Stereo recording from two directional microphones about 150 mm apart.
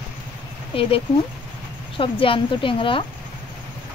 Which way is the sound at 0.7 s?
40° left (ahead or behind).